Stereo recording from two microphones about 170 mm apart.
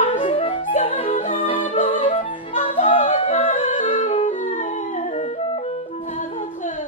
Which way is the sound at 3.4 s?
45° left (ahead or behind).